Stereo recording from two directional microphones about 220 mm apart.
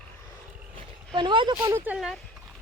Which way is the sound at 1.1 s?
20° right (ahead or behind).